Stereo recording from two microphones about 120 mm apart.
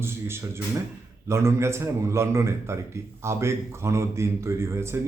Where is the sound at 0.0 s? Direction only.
20° right (ahead or behind).